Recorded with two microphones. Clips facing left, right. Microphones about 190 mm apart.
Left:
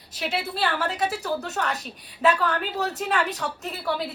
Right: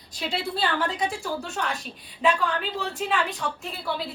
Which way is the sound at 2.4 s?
40° left (ahead or behind).